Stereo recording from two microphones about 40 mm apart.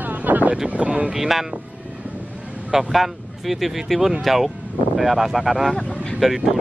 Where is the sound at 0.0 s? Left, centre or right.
Right.